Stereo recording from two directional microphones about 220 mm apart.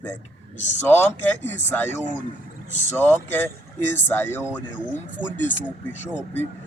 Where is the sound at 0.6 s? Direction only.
30° left (ahead or behind).